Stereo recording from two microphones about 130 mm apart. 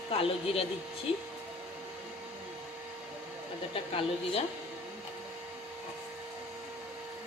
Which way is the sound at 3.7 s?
45° left (ahead or behind).